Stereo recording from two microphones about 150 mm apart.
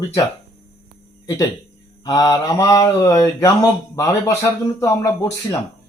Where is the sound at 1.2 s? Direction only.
20° left (ahead or behind).